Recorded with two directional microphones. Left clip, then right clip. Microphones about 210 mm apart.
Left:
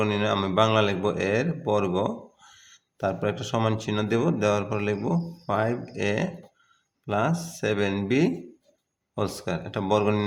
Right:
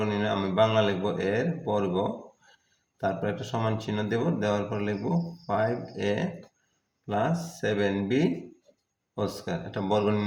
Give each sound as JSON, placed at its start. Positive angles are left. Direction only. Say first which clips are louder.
{"t": 0.0, "sound": "speech", "louder": "left 3 dB", "side_deg": 45}